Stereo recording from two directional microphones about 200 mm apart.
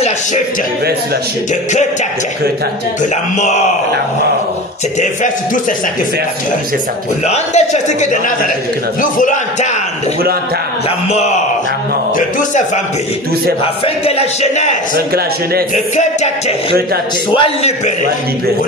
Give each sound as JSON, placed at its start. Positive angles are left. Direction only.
{"t": 3.0, "sound": "a man's voice", "side_deg": 35}
{"t": 5.0, "sound": "a man's voice", "side_deg": 40}
{"t": 7.2, "sound": "a man's voice", "side_deg": 35}
{"t": 11.1, "sound": "a man's voice", "side_deg": 35}
{"t": 14.0, "sound": "a man's voice", "side_deg": 30}
{"t": 15.7, "sound": "a man's voice", "side_deg": 35}